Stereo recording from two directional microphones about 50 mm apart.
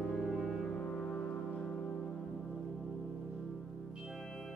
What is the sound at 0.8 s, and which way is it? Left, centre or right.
Foghorn, centre.